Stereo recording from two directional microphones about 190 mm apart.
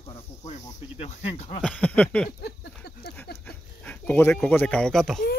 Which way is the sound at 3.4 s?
5° left (ahead or behind).